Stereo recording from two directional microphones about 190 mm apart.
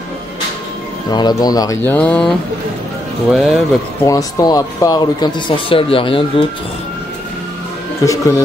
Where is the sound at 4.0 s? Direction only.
15° left (ahead or behind).